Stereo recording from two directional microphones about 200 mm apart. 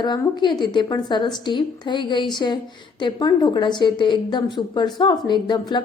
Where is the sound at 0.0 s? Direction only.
20° left (ahead or behind).